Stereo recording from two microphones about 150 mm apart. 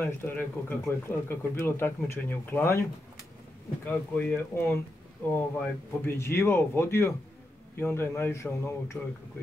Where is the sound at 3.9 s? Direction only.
10° left (ahead or behind).